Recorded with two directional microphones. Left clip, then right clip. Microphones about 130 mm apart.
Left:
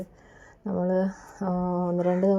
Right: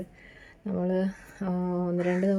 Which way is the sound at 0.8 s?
20° right (ahead or behind).